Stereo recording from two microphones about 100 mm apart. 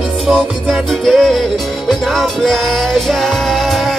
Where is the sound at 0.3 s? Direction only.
Centre (ahead or behind).